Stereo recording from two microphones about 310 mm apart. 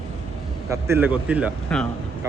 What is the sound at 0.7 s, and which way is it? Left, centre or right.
Speech, centre.